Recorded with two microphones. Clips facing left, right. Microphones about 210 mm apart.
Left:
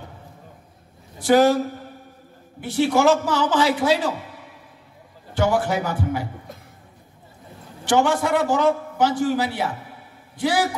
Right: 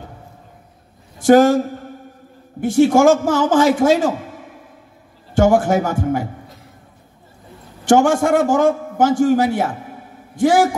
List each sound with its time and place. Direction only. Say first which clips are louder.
1.2 s a man's voice: right 5 dB; 45° right (ahead or behind)
2.6 s a man's voice: right 6 dB; 45° right (ahead or behind)
7.8 s a man's voice: right 6 dB; 45° right (ahead or behind)